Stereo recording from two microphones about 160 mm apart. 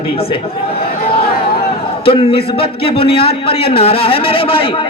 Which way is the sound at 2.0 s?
35° left (ahead or behind).